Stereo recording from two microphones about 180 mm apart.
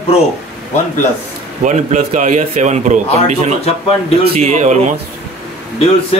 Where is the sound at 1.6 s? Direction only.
40° right (ahead or behind).